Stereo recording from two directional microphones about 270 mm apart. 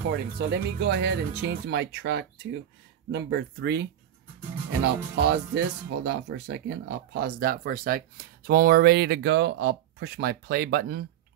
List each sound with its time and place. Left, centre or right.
0.1 s speech: right
4.8 s speech: right